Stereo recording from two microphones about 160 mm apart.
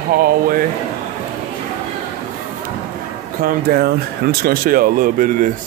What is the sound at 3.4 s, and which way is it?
Speech, 70° right (ahead or behind).